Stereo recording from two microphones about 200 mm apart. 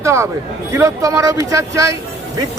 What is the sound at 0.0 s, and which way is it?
A man's voice, 15° right (ahead or behind).